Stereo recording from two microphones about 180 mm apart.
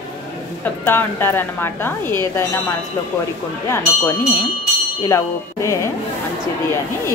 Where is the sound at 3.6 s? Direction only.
15° left (ahead or behind).